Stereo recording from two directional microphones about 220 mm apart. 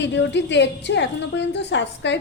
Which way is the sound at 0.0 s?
55° left (ahead or behind).